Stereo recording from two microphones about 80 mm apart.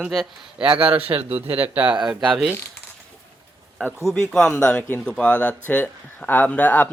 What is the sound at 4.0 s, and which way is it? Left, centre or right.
Speech, centre.